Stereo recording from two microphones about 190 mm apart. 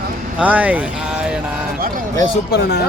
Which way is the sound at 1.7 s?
50° right (ahead or behind).